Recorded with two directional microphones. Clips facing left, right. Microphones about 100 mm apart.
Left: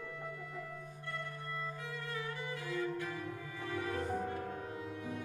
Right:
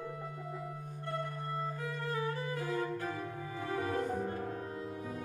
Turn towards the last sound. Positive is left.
turn(degrees=-40)  # may be behind; listen again after turning